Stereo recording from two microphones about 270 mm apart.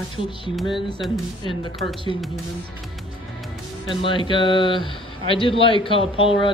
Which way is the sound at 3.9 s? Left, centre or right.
Centre.